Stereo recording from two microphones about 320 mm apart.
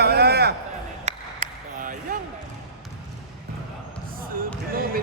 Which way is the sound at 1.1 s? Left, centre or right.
Right.